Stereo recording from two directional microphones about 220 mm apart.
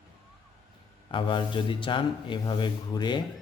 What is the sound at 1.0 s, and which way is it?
Speech, 20° left (ahead or behind).